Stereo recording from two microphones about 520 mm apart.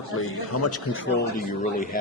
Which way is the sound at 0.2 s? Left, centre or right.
Left.